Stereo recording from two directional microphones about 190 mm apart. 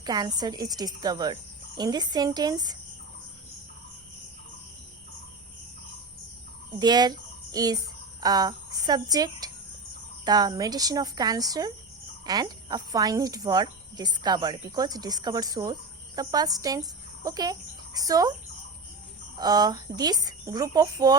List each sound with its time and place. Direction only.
0.0 s speech: 20° right (ahead or behind)
6.7 s speech: 20° right (ahead or behind)
19.4 s speech: 20° right (ahead or behind)